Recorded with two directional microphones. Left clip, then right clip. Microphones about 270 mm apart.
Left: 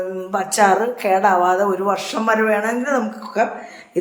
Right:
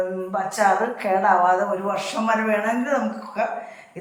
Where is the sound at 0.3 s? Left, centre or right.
Left.